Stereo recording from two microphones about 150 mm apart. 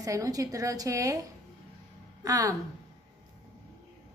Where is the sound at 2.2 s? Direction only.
25° right (ahead or behind).